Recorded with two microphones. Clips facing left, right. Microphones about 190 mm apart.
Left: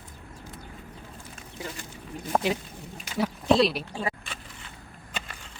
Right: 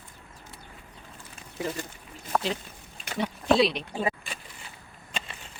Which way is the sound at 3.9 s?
20° right (ahead or behind).